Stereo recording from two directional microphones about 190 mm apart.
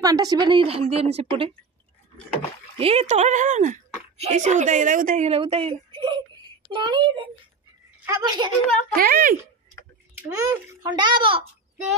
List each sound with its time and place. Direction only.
0.0 s a woman's voice: 20° right (ahead or behind)
2.8 s a woman's voice: 35° right (ahead or behind)
8.9 s speech: 50° right (ahead or behind)
10.3 s a woman's voice: 25° right (ahead or behind)